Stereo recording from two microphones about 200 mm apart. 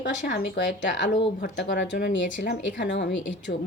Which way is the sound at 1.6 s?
60° left (ahead or behind).